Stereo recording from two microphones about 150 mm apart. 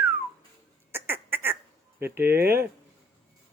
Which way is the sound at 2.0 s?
15° right (ahead or behind).